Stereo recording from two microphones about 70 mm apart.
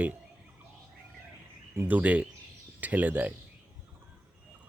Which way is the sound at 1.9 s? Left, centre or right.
Right.